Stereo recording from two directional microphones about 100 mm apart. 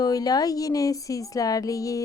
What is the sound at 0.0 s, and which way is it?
Speech, 40° left (ahead or behind).